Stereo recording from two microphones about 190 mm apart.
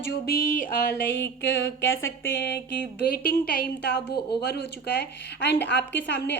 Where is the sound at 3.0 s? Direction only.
55° left (ahead or behind).